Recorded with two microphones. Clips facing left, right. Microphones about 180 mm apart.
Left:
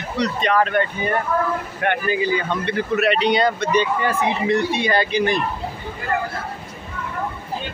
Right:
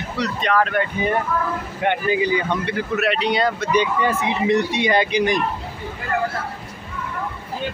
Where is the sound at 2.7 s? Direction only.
Centre (ahead or behind).